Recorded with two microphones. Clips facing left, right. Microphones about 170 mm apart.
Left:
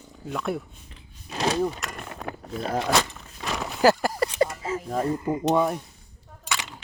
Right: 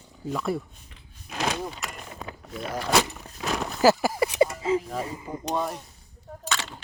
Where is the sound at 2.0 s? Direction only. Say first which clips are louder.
Left 4 dB; 60° left (ahead or behind).